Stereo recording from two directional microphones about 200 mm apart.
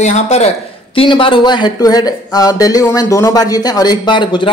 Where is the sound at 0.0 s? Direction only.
35° left (ahead or behind).